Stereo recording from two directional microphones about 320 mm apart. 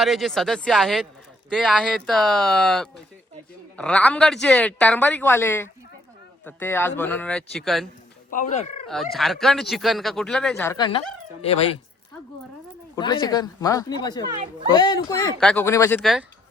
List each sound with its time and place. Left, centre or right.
0.0 s speech: centre
8.3 s speech: left
8.9 s speech: centre
13.0 s speech: centre